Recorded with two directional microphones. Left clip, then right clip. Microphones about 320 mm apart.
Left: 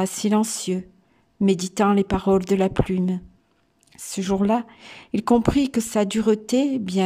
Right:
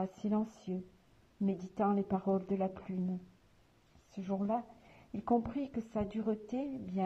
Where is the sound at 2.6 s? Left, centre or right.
Centre.